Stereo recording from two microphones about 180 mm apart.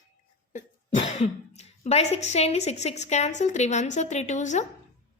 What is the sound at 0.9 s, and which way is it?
A woman's voice, 35° left (ahead or behind).